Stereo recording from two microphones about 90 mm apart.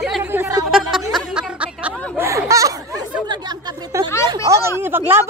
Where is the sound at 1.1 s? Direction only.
5° right (ahead or behind).